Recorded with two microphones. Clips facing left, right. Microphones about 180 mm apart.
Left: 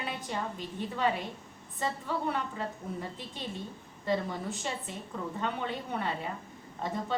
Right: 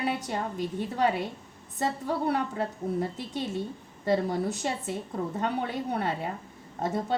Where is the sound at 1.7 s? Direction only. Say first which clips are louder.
Right 4 dB; 40° right (ahead or behind).